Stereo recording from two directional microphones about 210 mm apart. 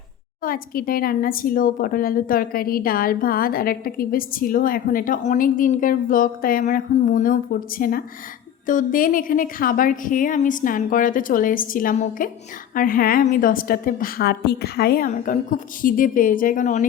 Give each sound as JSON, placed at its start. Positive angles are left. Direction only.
{"t": 0.4, "sound": "a woman's voice", "side_deg": 45}